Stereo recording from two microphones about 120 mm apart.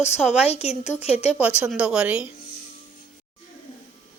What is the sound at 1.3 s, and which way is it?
Speech, 10° right (ahead or behind).